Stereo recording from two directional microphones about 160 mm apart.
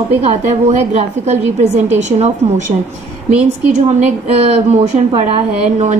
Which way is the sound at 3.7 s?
45° right (ahead or behind).